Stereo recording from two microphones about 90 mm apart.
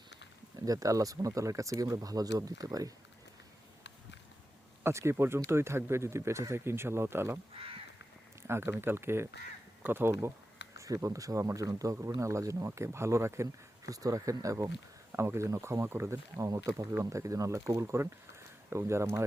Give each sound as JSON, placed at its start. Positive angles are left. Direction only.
{"t": 0.5, "sound": "speech", "side_deg": -40}
{"t": 4.8, "sound": "speech", "side_deg": -30}
{"t": 8.4, "sound": "speech", "side_deg": -30}